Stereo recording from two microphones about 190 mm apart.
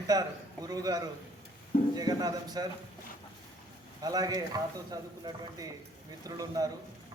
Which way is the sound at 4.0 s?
20° right (ahead or behind).